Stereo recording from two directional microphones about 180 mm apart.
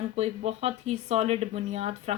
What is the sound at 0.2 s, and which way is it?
A woman's voice, 35° right (ahead or behind).